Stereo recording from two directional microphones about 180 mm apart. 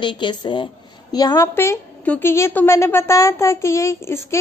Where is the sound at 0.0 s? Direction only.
25° left (ahead or behind).